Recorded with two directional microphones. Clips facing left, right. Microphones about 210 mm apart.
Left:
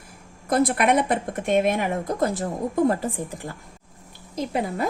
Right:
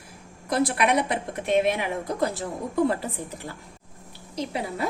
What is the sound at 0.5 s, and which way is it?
Speech, 50° left (ahead or behind).